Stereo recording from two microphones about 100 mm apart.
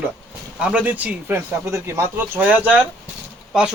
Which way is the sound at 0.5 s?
10° right (ahead or behind).